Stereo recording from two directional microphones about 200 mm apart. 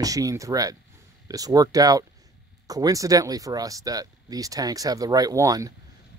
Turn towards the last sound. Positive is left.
turn(degrees=-15)  # may be behind; listen again after turning